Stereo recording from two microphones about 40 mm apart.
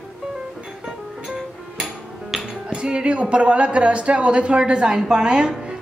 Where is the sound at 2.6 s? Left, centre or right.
Right.